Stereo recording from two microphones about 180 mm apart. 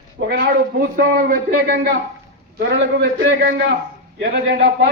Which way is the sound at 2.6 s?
80° right.